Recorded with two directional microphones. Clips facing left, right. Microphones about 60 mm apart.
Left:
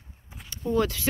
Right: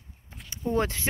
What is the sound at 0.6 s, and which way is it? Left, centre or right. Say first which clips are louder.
Speech: left 2 dB; right.